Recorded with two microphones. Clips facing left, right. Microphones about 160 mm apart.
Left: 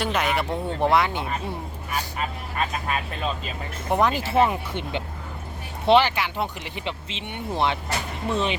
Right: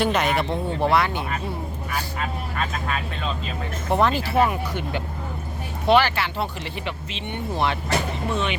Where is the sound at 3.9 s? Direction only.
15° left (ahead or behind).